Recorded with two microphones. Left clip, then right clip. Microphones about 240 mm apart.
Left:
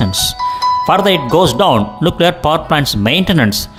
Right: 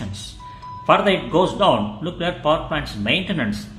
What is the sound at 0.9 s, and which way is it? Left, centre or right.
Speech, left.